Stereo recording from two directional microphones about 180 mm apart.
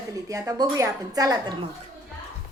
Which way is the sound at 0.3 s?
20° right (ahead or behind).